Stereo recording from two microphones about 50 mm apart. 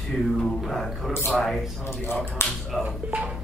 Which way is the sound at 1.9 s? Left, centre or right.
Left.